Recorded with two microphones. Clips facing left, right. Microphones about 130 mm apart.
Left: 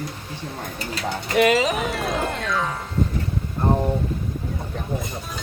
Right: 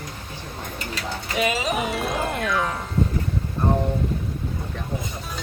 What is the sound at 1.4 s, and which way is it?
Speech, 70° left (ahead or behind).